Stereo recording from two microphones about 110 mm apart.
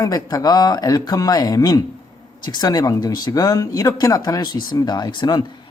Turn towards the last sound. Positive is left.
turn(degrees=40)  # may be behind; listen again after turning